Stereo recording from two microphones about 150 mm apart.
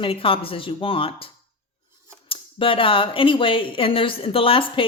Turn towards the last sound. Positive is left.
turn(degrees=35)  # may be behind; listen again after turning